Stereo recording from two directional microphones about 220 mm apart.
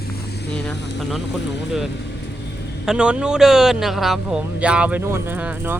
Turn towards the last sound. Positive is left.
turn(degrees=-10)  # may be behind; listen again after turning